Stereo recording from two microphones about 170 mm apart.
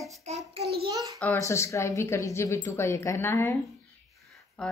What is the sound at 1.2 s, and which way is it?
Speech, 15° left (ahead or behind).